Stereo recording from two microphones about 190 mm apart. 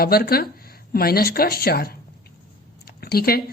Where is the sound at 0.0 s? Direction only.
55° left (ahead or behind).